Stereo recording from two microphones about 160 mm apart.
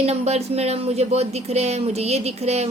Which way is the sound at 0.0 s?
40° right (ahead or behind).